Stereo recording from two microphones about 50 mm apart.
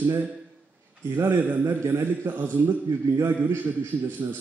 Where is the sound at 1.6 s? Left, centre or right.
Right.